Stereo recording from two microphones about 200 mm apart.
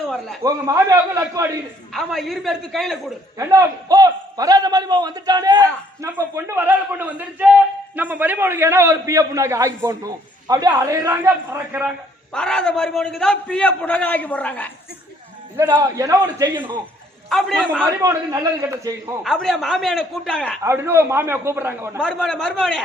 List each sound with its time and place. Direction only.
0.4 s a man's voice: 15° right (ahead or behind)
1.9 s a man's voice: centre (ahead or behind)
3.3 s a man's voice: 15° right (ahead or behind)
12.3 s a man's voice: 5° left (ahead or behind)
15.5 s a man's voice: 15° right (ahead or behind)
17.2 s a man's voice: centre (ahead or behind)
17.8 s a man's voice: 15° right (ahead or behind)
19.2 s a man's voice: centre (ahead or behind)
20.6 s a man's voice: 10° right (ahead or behind)
22.0 s a man's voice: centre (ahead or behind)